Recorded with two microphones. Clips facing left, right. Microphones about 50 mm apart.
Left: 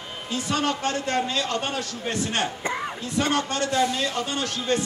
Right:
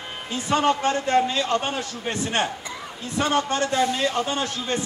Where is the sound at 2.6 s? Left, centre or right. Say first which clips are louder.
Left 7 dB; left.